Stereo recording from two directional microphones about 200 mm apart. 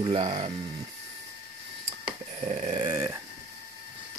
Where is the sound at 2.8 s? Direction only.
20° right (ahead or behind).